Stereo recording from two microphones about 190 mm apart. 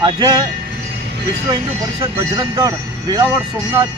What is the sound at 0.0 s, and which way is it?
Speech, 25° right (ahead or behind).